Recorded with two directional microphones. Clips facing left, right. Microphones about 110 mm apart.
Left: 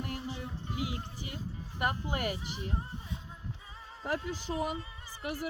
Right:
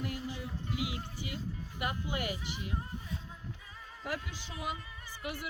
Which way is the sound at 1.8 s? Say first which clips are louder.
Left 4 dB; 40° left (ahead or behind).